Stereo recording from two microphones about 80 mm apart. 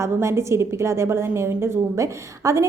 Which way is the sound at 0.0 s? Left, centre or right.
Right.